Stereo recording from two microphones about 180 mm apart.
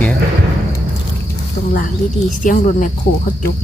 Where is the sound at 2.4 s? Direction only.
45° left (ahead or behind).